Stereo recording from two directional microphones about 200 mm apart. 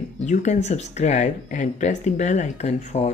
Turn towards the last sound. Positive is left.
turn(degrees=35)  # may be behind; listen again after turning